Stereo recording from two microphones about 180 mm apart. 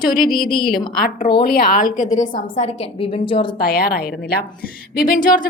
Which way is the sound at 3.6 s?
55° left (ahead or behind).